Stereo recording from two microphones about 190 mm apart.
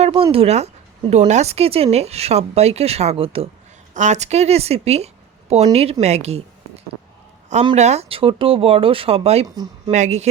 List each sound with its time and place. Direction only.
0.0 s a woman's voice: 30° right (ahead or behind)